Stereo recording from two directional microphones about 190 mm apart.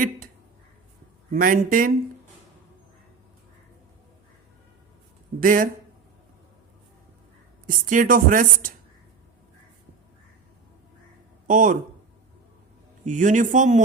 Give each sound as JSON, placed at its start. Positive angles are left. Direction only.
{"t": 1.3, "sound": "speech", "side_deg": -50}
{"t": 5.4, "sound": "speech", "side_deg": -45}
{"t": 7.7, "sound": "speech", "side_deg": -45}
{"t": 11.4, "sound": "speech", "side_deg": -45}
{"t": 13.1, "sound": "speech", "side_deg": -40}